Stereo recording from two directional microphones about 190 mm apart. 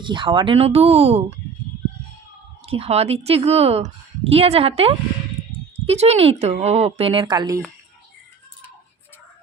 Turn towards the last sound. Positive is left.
turn(degrees=-20)  # may be behind; listen again after turning